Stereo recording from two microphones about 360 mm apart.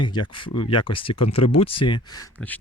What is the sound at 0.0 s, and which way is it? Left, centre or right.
Speech, centre.